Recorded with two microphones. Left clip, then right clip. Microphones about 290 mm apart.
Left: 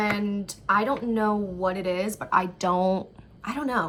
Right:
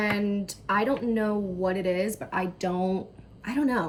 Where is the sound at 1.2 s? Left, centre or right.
Left.